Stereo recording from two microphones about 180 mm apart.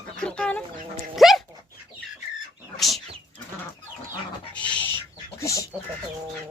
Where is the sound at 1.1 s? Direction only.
Centre (ahead or behind).